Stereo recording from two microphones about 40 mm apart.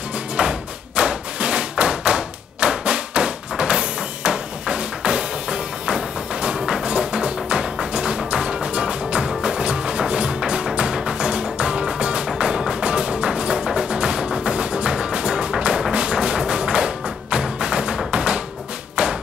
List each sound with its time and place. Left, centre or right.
0.4 s thump: right
7.8 s music: right
19.0 s thump: right